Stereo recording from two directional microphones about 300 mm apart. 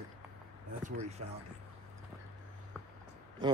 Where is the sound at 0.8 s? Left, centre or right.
Right.